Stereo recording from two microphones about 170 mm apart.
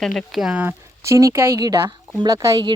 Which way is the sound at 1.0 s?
20° right (ahead or behind).